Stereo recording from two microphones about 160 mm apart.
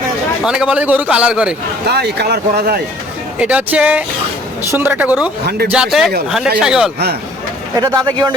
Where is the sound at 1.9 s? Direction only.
90° right.